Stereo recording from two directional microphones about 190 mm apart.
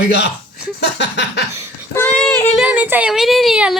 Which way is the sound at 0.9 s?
65° left (ahead or behind).